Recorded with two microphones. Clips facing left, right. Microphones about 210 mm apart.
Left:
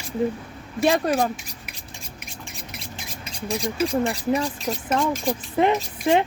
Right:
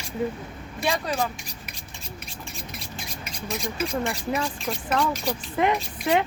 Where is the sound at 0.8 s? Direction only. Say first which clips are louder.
Left 6 dB; 50° left (ahead or behind).